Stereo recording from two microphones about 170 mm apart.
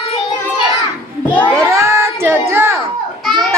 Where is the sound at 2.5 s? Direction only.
15° right (ahead or behind).